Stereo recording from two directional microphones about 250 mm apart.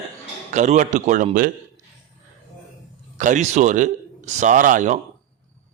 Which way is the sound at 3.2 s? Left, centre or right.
Right.